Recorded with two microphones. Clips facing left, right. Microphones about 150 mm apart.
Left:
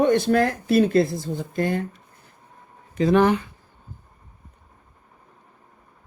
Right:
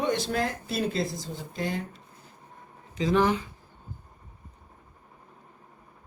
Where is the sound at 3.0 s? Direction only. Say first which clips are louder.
Left 6 dB; 60° left (ahead or behind).